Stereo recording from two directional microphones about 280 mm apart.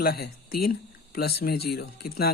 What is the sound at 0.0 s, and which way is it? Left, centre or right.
Speech, left.